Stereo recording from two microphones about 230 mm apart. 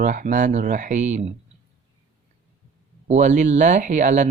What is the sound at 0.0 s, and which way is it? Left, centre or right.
Speech, right.